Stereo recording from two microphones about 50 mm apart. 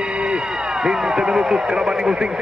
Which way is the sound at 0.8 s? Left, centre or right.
Centre.